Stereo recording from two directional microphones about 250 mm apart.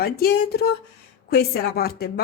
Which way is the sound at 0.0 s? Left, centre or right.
Left.